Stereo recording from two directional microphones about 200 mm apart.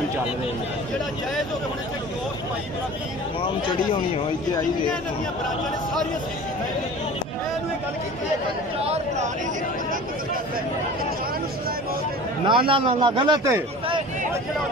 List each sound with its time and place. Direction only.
8.8 s speech: 35° right (ahead or behind)
12.4 s a man's voice: 25° right (ahead or behind)